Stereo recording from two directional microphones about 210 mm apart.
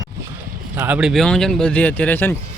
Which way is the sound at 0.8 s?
5° right (ahead or behind).